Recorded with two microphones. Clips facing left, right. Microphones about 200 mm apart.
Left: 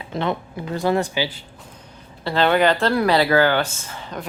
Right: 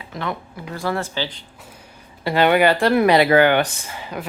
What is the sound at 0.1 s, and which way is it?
Speech, 25° left (ahead or behind).